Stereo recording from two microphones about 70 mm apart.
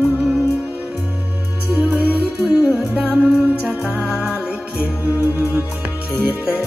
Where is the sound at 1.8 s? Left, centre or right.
Right.